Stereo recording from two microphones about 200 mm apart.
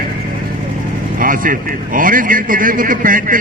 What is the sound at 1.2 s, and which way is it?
A man's voice, 45° right (ahead or behind).